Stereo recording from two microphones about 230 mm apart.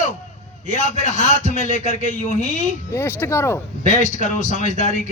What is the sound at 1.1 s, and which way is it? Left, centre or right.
A man's voice, left.